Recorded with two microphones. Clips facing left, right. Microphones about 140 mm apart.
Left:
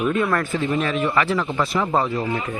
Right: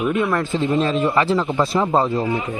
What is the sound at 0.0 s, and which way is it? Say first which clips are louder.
Speech: right 1 dB; 15° right (ahead or behind).